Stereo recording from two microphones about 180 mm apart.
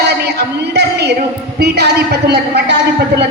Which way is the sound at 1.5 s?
65° right (ahead or behind).